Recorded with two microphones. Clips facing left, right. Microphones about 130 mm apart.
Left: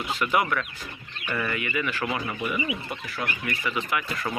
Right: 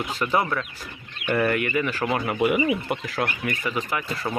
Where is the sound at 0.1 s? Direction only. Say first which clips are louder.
Even; 35° right (ahead or behind).